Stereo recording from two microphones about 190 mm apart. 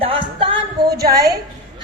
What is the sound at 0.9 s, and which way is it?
Speech, 55° right (ahead or behind).